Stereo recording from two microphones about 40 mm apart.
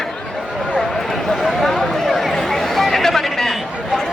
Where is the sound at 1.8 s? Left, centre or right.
Centre.